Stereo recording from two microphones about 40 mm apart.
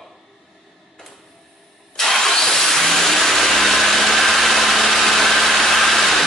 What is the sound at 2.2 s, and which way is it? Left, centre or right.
Vehicle, centre.